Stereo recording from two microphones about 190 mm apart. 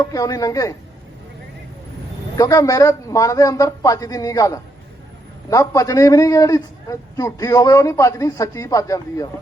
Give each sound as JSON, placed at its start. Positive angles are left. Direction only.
{"t": 0.0, "sound": "speech", "side_deg": 20}
{"t": 2.4, "sound": "a man's voice", "side_deg": 20}